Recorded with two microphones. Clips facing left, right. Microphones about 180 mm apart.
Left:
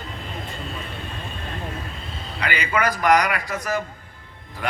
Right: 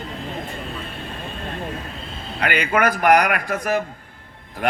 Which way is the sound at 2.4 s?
55° right (ahead or behind).